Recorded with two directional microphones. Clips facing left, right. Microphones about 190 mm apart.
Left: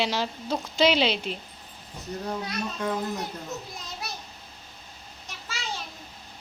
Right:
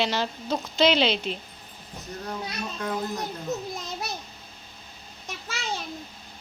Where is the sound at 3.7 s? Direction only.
45° right (ahead or behind).